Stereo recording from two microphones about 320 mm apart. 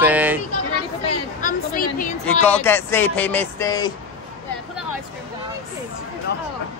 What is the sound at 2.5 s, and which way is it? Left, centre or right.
Speech, centre.